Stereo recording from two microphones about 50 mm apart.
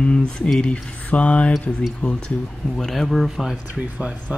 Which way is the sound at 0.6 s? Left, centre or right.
Left.